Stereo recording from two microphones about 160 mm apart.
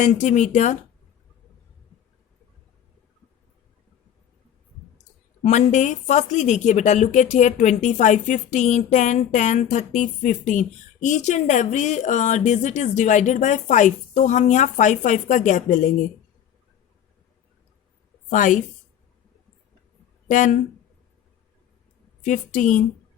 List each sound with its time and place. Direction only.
0.0 s speech: 50° left (ahead or behind)
5.4 s speech: 50° left (ahead or behind)
18.3 s speech: 50° left (ahead or behind)
20.2 s speech: 50° left (ahead or behind)
22.2 s speech: 50° left (ahead or behind)